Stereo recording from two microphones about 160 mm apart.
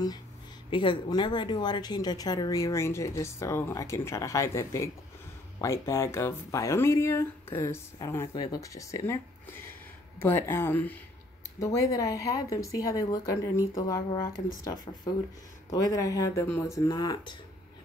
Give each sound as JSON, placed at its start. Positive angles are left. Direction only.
{"t": 0.7, "sound": "speech", "side_deg": 30}
{"t": 15.7, "sound": "speech", "side_deg": 20}